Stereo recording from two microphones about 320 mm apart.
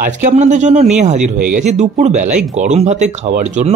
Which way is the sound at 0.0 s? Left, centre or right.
Right.